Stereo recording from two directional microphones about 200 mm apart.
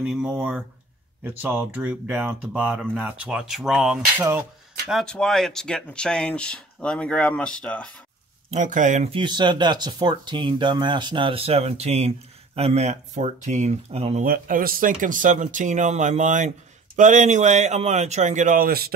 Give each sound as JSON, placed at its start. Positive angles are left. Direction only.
{"t": 0.0, "sound": "speech", "side_deg": -5}
{"t": 8.5, "sound": "speech", "side_deg": -40}
{"t": 14.2, "sound": "speech", "side_deg": -45}